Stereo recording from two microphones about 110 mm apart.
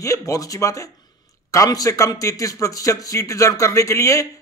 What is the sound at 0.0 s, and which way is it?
A man's voice, 30° left (ahead or behind).